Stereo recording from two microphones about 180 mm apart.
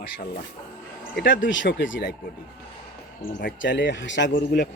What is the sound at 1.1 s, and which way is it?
Speech, 80° left.